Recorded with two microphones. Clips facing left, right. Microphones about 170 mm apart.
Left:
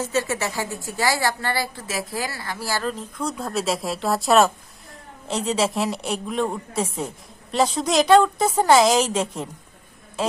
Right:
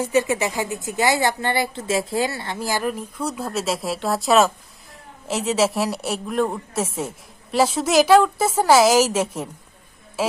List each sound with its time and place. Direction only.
0.0 s a woman's voice: 15° right (ahead or behind)